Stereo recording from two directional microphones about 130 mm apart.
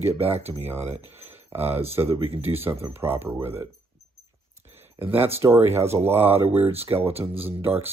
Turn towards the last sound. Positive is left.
turn(degrees=-15)  # may be behind; listen again after turning